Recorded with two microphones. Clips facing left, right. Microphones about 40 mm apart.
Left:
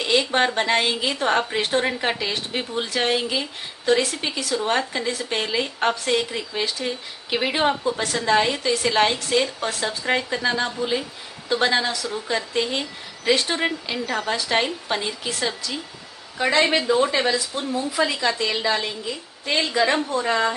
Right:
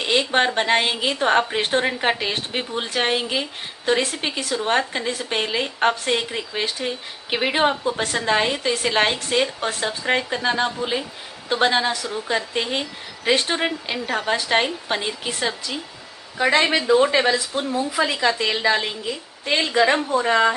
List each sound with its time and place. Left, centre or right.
0.0 s a woman's voice: right
16.6 s speech: centre
17.0 s a woman's voice: right